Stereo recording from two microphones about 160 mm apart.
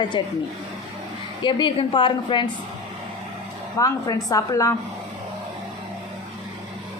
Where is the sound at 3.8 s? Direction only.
20° left (ahead or behind).